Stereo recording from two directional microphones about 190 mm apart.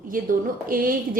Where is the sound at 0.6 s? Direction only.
50° right (ahead or behind).